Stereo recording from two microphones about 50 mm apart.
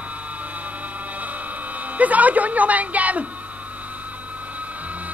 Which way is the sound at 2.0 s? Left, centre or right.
Right.